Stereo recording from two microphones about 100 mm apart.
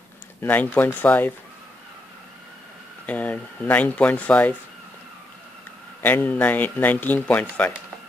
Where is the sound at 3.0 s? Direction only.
15° left (ahead or behind).